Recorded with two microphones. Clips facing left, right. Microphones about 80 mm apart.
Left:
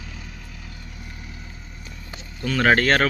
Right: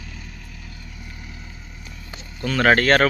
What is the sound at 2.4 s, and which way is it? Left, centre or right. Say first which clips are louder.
Speech: right 1 dB; centre.